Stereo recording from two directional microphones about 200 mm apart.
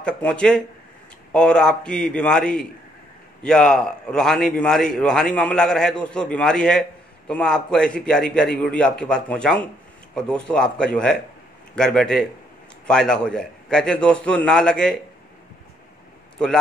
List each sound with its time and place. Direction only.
0.0 s a man's voice: 5° left (ahead or behind)